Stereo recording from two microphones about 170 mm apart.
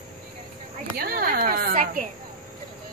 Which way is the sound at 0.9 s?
60° right (ahead or behind).